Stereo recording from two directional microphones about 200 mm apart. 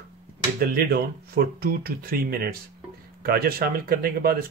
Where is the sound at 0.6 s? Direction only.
50° right (ahead or behind).